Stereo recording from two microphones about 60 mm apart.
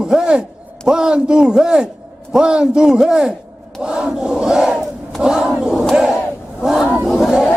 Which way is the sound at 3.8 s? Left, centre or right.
Centre.